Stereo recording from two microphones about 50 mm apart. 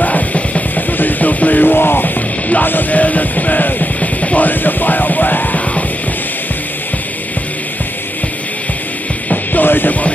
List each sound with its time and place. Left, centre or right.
0.0 s music: left
9.3 s music: left